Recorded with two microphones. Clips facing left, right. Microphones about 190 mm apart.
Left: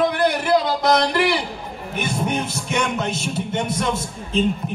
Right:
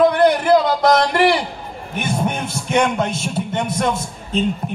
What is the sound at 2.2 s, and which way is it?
Music, 50° right (ahead or behind).